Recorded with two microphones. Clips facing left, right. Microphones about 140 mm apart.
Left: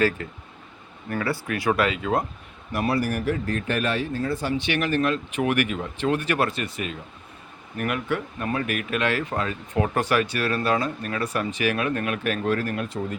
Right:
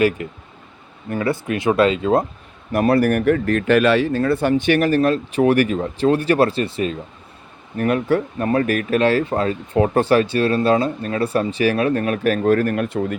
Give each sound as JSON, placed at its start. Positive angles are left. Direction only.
{"t": 0.2, "sound": "speech", "side_deg": -20}
{"t": 2.7, "sound": "speech", "side_deg": -50}